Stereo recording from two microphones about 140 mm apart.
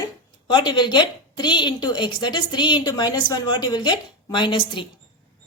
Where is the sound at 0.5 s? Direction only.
35° left (ahead or behind).